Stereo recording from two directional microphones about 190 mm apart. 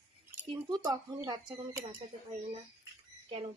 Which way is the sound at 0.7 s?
20° right (ahead or behind).